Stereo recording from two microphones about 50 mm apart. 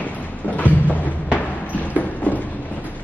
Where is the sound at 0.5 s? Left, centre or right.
Left.